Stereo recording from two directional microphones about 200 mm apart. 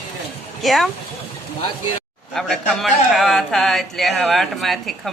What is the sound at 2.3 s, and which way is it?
A man's voice, centre (ahead or behind).